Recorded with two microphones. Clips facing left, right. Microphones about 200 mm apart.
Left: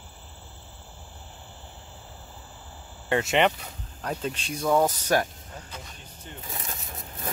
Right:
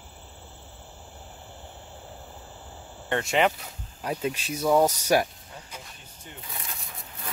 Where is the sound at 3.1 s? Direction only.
5° left (ahead or behind).